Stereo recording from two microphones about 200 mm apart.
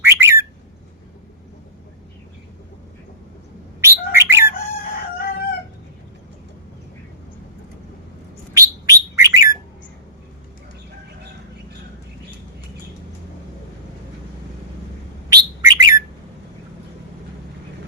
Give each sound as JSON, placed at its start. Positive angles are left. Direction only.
{"t": 0.0, "sound": "bird", "side_deg": -10}
{"t": 3.8, "sound": "bird", "side_deg": -15}
{"t": 8.5, "sound": "bird", "side_deg": -15}
{"t": 15.3, "sound": "bird", "side_deg": -20}